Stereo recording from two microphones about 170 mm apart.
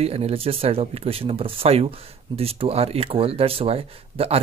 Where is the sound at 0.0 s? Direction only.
35° right (ahead or behind).